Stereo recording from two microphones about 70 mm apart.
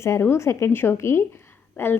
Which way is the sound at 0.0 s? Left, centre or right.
Left.